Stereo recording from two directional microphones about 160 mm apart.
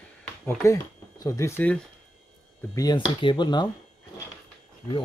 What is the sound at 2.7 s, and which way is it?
Speech, 25° left (ahead or behind).